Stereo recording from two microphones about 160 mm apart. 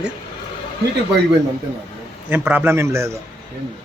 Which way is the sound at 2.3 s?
10° right (ahead or behind).